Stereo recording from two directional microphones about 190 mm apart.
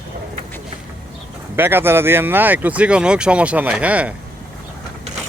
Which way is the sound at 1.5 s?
10° right (ahead or behind).